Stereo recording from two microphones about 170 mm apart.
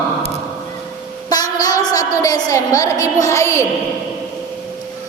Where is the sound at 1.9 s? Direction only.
20° left (ahead or behind).